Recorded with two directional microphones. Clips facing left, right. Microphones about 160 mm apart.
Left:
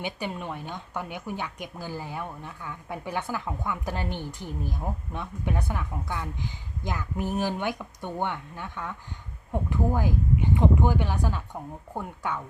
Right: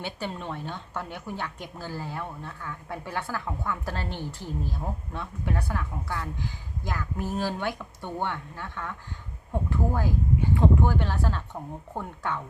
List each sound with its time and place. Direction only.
0.0 s speech: 10° left (ahead or behind)